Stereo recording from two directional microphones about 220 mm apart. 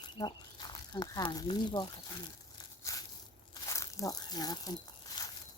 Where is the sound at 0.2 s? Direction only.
20° left (ahead or behind).